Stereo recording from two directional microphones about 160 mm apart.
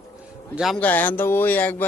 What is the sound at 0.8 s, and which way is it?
Speech, 10° left (ahead or behind).